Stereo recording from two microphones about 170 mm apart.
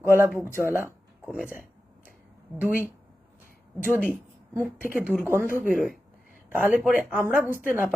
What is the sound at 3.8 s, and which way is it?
Speech, 10° right (ahead or behind).